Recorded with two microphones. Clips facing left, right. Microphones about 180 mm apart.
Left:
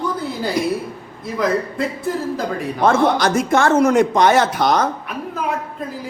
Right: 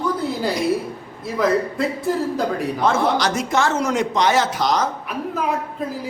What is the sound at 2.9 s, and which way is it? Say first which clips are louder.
Speech: left 4 dB; 50° left (ahead or behind).